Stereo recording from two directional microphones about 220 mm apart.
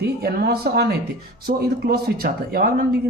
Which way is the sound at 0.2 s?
45° right (ahead or behind).